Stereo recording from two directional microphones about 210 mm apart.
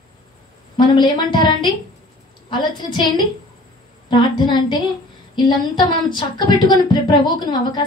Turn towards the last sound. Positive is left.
turn(degrees=20)  # may be behind; listen again after turning